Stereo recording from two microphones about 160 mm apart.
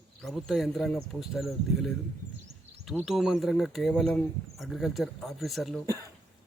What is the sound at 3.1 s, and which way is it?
Speech, centre (ahead or behind).